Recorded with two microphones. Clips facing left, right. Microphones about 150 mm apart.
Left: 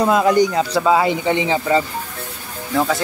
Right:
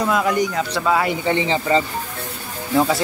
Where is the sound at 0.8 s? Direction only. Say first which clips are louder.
Left 2 dB; 20° left (ahead or behind).